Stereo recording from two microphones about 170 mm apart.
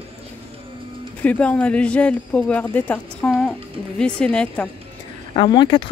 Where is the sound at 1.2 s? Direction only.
10° left (ahead or behind).